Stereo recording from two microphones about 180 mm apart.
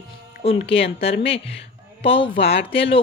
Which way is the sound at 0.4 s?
35° left (ahead or behind).